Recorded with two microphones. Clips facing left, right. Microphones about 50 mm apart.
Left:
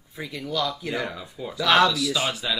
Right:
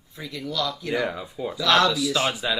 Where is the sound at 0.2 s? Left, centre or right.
Centre.